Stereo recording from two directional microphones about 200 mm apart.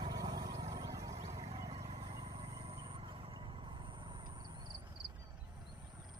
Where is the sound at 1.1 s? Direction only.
30° right (ahead or behind).